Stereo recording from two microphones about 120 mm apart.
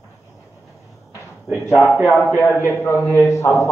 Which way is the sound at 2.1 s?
15° left (ahead or behind).